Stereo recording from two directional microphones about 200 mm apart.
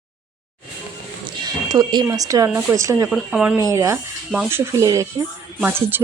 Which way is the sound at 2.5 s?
5° right (ahead or behind).